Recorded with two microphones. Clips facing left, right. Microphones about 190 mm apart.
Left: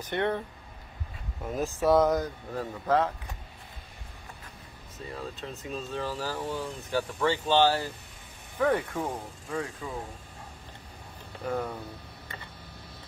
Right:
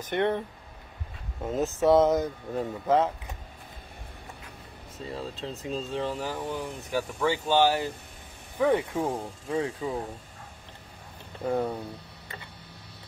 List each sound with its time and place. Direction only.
0.0 s speech: 20° right (ahead or behind)
1.4 s speech: 25° right (ahead or behind)
5.0 s speech: 30° right (ahead or behind)
9.1 s speech: 25° right (ahead or behind)
11.4 s speech: 25° right (ahead or behind)